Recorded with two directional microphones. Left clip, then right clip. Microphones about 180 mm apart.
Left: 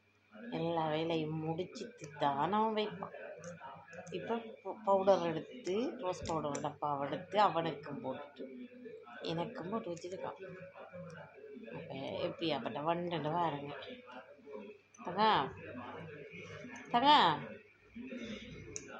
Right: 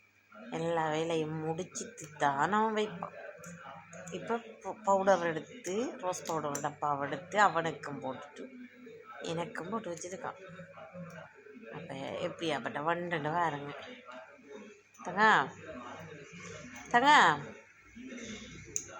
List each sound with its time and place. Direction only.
0.5 s speech: 20° right (ahead or behind)
4.1 s speech: 20° right (ahead or behind)
9.2 s speech: 20° right (ahead or behind)
12.0 s speech: 20° right (ahead or behind)
15.0 s speech: 20° right (ahead or behind)
16.9 s speech: 25° right (ahead or behind)